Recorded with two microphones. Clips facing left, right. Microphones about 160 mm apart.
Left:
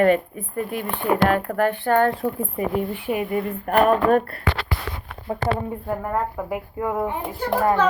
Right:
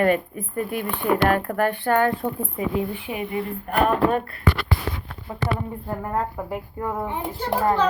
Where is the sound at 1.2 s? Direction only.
45° right (ahead or behind).